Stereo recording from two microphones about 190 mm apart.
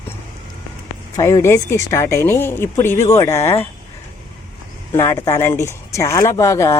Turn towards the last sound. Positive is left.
turn(degrees=15)  # may be behind; listen again after turning